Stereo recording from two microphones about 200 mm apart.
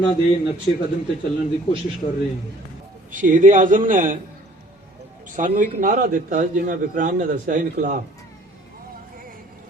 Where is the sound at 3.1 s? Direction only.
40° right (ahead or behind).